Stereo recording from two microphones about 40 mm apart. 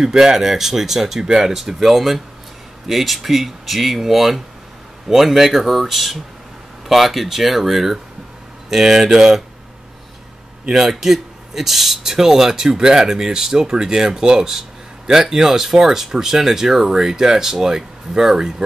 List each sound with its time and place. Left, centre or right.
0.0 s speech: centre
1.5 s speech: centre
9.1 s speech: centre
10.7 s speech: centre